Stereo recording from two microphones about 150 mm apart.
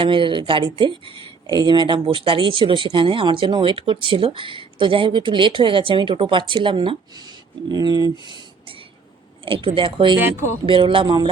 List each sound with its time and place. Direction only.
0.0 s speech: 35° right (ahead or behind)
9.5 s speech: 35° right (ahead or behind)